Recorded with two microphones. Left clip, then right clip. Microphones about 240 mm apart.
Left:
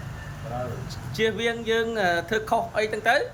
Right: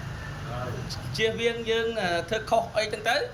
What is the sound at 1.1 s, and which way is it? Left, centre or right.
Speech, left.